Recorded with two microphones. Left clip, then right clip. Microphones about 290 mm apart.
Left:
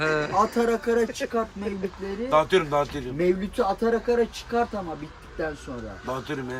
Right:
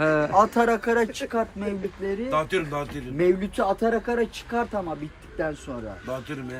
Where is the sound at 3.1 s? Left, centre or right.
Centre.